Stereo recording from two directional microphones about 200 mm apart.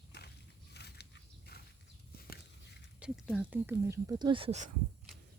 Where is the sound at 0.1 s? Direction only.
55° left (ahead or behind).